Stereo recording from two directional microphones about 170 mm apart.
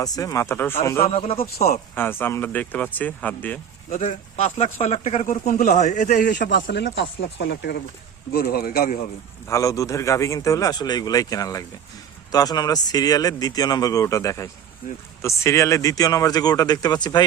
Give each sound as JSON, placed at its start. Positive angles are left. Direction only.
{"t": 0.0, "sound": "speech", "side_deg": 20}
{"t": 1.0, "sound": "speech", "side_deg": 35}
{"t": 1.6, "sound": "speech", "side_deg": 45}
{"t": 2.0, "sound": "speech", "side_deg": 10}
{"t": 3.8, "sound": "speech", "side_deg": 45}
{"t": 6.5, "sound": "speech", "side_deg": 90}
{"t": 8.3, "sound": "speech", "side_deg": 65}
{"t": 9.5, "sound": "speech", "side_deg": 20}